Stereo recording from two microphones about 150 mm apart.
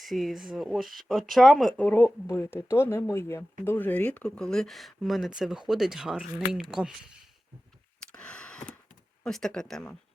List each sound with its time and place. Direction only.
0.0 s speech: centre (ahead or behind)
8.0 s a sound: 5° left (ahead or behind)
9.2 s speech: 5° left (ahead or behind)